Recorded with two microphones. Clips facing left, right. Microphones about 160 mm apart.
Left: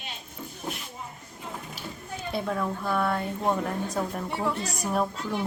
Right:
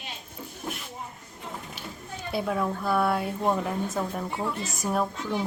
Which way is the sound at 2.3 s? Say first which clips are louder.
Right 2 dB; 5° right (ahead or behind).